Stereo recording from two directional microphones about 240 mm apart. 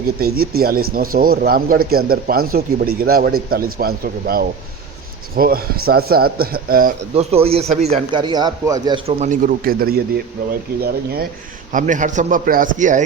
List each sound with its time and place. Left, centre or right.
0.3 s a man's voice: right; by 9.0 s centre
9.0 s a man's voice: right